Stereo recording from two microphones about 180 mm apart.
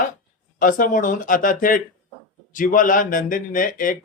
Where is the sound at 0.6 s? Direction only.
50° left (ahead or behind).